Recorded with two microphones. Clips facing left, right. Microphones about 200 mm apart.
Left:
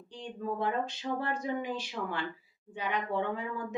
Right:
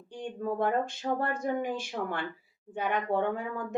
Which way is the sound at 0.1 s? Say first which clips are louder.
Right 3 dB; 50° right (ahead or behind).